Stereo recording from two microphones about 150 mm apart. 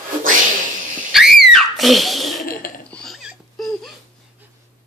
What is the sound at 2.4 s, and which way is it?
Burping, 75° left (ahead or behind).